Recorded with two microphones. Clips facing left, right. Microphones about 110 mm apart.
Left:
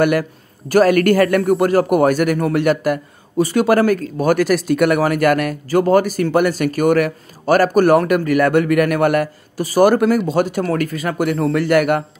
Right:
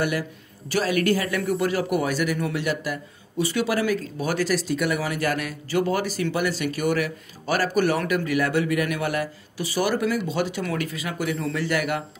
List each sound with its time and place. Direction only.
0.0 s a man's voice: 60° left (ahead or behind)